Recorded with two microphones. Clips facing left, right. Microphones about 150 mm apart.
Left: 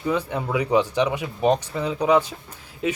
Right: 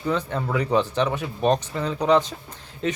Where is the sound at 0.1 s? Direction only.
10° left (ahead or behind).